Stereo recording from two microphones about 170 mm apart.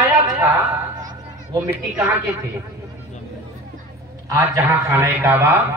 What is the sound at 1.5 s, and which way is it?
Speech, 20° right (ahead or behind).